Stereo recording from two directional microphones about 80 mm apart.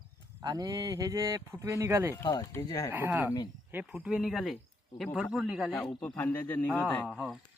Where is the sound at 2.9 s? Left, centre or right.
Right.